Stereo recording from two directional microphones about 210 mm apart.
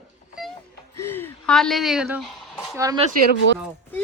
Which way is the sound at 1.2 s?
5° left (ahead or behind).